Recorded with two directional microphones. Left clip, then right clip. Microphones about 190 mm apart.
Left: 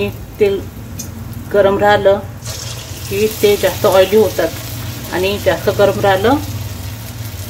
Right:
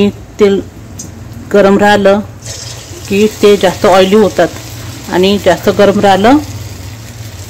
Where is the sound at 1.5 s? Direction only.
60° right (ahead or behind).